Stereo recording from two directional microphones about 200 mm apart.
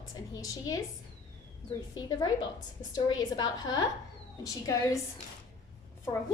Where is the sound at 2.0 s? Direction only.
20° left (ahead or behind).